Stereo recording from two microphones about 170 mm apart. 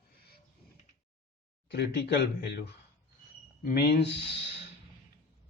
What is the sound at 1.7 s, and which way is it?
Speech, 80° left.